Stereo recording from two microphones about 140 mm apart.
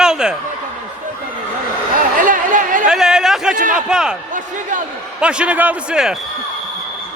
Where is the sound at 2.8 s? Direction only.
5° right (ahead or behind).